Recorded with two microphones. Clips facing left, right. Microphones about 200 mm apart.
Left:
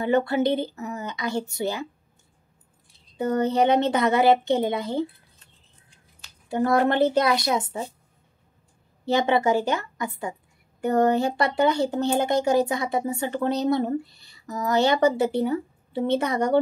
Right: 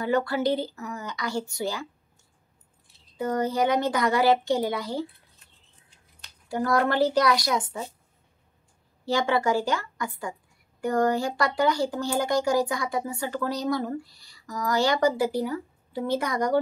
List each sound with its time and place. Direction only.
0.0 s speech: 20° left (ahead or behind)
3.2 s speech: 25° left (ahead or behind)
6.5 s speech: 25° left (ahead or behind)
9.0 s speech: 20° left (ahead or behind)